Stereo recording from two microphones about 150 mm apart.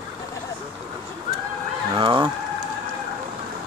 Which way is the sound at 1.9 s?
30° right (ahead or behind).